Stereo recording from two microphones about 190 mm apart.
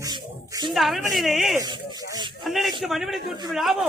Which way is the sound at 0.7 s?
Centre (ahead or behind).